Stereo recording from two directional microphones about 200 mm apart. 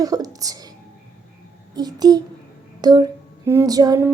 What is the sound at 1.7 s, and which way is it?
A child's voice, 20° right (ahead or behind).